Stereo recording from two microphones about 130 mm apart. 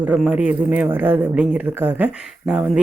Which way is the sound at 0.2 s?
10° right (ahead or behind).